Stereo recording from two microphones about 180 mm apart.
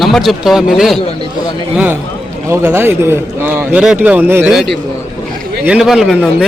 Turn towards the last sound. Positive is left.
turn(degrees=0)  # may be behind; listen again after turning